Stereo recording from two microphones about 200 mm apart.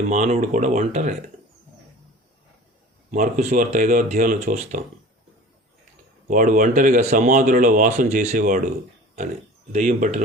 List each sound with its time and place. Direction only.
0.1 s speech: 35° right (ahead or behind)
3.1 s speech: 40° right (ahead or behind)
6.2 s speech: 40° right (ahead or behind)
9.7 s speech: 35° right (ahead or behind)